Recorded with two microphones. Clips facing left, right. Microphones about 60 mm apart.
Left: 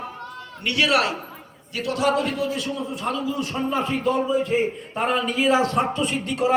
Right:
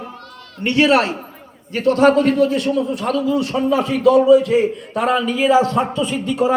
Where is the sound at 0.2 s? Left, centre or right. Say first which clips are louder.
Left 2 dB; centre.